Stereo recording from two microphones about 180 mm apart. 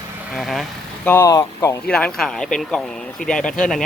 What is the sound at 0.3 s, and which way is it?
Speech, centre (ahead or behind).